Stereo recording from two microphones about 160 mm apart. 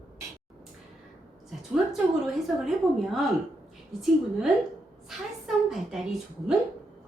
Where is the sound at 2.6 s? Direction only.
Centre (ahead or behind).